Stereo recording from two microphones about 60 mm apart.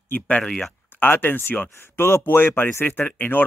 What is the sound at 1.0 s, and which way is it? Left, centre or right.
Speech, left.